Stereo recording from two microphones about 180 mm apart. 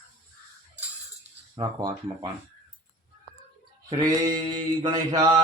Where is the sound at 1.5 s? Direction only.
20° right (ahead or behind).